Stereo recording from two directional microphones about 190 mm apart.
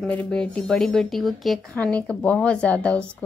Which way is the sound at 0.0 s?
5° left (ahead or behind).